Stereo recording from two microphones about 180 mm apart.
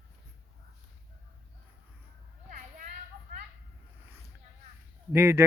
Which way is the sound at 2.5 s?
40° right (ahead or behind).